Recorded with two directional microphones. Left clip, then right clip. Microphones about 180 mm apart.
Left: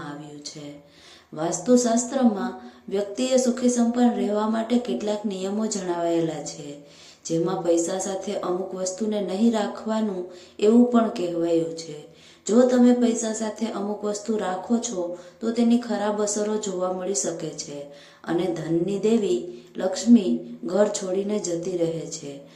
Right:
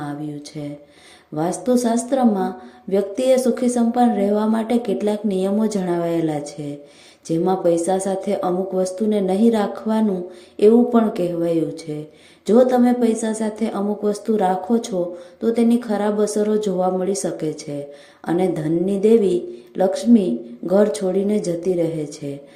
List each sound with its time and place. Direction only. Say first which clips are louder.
1.4 s speech: right 2 dB; 45° right (ahead or behind)